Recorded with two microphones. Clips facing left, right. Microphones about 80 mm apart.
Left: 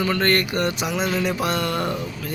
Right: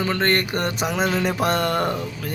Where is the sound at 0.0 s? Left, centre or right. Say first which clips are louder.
Left 1 dB; right.